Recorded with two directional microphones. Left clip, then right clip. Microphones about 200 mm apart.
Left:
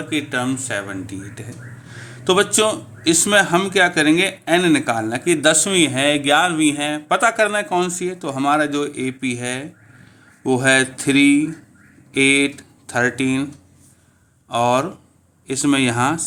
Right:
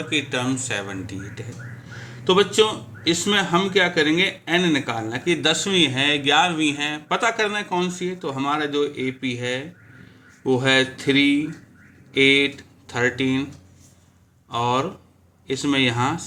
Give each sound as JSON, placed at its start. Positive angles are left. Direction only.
{"t": 0.1, "sound": "speech", "side_deg": 30}
{"t": 1.9, "sound": "a man's voice", "side_deg": 50}
{"t": 14.5, "sound": "a man's voice", "side_deg": 50}